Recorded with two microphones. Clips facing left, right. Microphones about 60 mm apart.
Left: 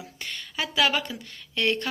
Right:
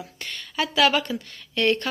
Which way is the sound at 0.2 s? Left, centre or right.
Centre.